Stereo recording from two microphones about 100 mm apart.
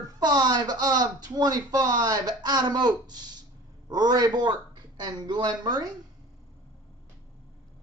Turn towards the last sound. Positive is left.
turn(degrees=-45)  # may be behind; listen again after turning